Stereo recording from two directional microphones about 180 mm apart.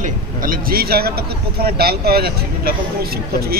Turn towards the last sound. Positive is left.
turn(degrees=-60)  # may be behind; listen again after turning